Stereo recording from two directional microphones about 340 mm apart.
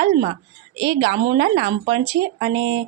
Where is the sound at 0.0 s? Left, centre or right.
Right.